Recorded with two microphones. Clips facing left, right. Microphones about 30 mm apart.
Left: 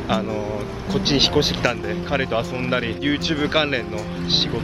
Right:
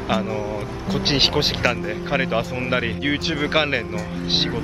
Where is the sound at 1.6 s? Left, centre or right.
Centre.